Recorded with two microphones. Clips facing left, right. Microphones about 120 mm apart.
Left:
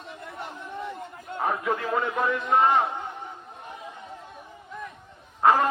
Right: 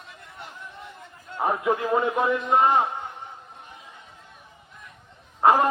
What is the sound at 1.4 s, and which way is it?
A man's voice, 20° right (ahead or behind).